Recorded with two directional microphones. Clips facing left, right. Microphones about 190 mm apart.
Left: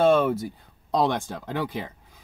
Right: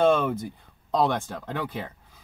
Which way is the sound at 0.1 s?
5° left (ahead or behind).